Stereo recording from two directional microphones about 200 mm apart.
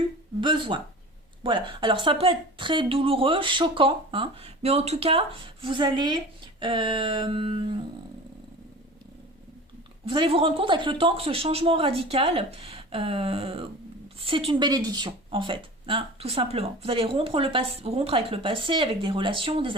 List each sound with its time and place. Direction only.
0.4 s speech: 25° right (ahead or behind)
10.1 s speech: 25° right (ahead or behind)